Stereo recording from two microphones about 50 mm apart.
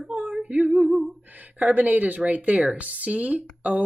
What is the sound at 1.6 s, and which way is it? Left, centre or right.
A woman's voice, right.